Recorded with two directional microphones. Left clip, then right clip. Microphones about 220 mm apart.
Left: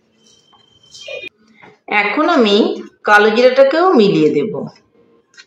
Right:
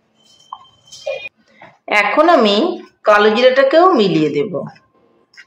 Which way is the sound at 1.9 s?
40° right (ahead or behind).